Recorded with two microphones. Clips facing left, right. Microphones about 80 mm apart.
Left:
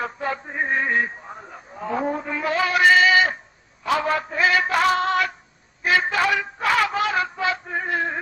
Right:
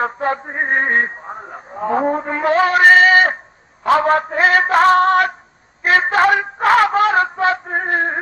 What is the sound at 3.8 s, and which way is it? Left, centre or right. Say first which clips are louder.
Female singing: right 8 dB; right.